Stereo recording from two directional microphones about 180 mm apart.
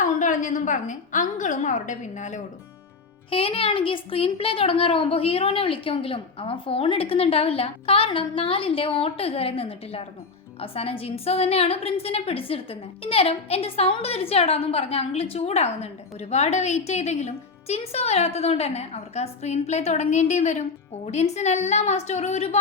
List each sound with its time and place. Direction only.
0.0 s a woman's voice: 45° left (ahead or behind)
3.2 s a woman's voice: 30° left (ahead or behind)